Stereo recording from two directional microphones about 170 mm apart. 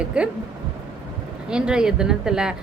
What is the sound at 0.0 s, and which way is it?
Speech, 5° right (ahead or behind).